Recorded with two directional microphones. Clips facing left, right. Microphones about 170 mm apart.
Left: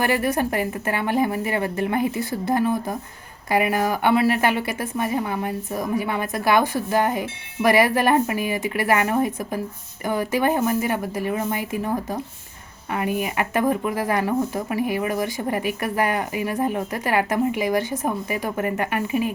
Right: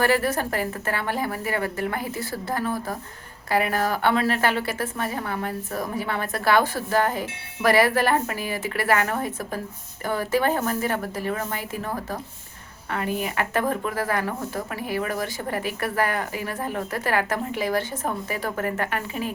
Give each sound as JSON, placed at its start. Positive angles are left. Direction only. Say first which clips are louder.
{"t": 0.0, "sound": "a woman's voice", "louder": "left 1 dB", "side_deg": 15}